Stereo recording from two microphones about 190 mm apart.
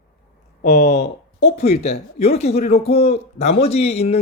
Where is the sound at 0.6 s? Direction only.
40° left (ahead or behind).